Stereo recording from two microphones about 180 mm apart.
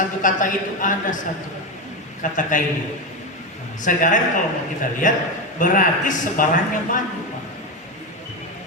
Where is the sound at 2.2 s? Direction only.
45° left (ahead or behind).